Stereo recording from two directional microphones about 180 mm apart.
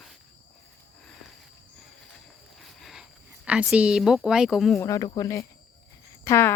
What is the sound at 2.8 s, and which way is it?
Speech, 5° right (ahead or behind).